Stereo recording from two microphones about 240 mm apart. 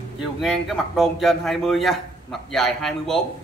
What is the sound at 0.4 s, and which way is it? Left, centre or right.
A man's voice, centre.